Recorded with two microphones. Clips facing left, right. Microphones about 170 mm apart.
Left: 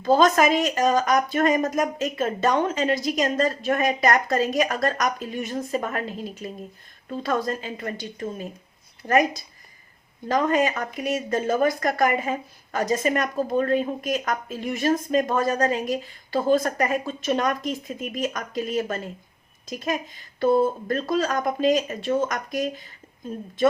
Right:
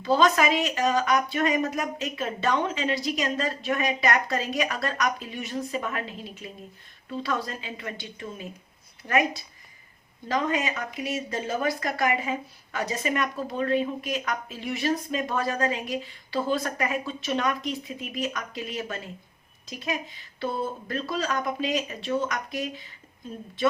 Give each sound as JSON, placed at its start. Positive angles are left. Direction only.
{"t": 0.0, "sound": "speech", "side_deg": 45}